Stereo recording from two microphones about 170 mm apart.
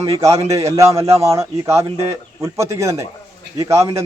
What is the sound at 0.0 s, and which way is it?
Speech, 20° right (ahead or behind).